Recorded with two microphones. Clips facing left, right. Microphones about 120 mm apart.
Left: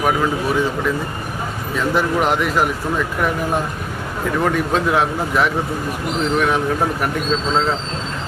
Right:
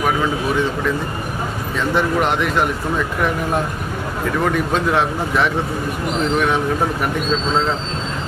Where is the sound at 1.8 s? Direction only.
Centre (ahead or behind).